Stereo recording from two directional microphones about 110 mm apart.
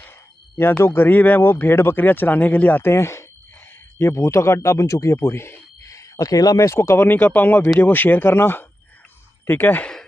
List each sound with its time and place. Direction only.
0.6 s speech: 20° left (ahead or behind)